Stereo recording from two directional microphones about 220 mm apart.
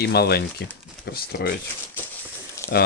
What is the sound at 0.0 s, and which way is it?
Speech, 45° left (ahead or behind).